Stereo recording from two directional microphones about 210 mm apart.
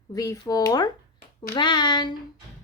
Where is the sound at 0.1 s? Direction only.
15° left (ahead or behind).